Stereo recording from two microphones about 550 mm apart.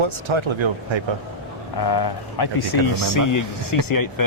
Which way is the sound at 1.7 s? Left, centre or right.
Left.